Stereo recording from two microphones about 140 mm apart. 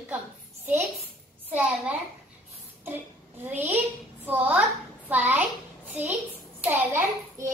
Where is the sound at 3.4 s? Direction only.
15° right (ahead or behind).